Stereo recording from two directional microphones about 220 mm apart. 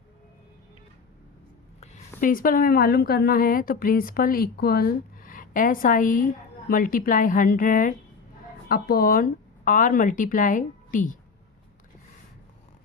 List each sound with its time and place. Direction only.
1.8 s a woman's voice: 40° left (ahead or behind)